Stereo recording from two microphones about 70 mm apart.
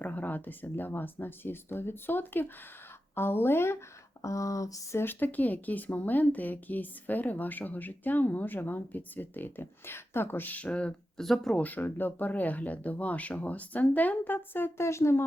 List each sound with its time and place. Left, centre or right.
0.0 s speech: left
4.9 s speech: left
11.2 s speech: centre
11.6 s speech: left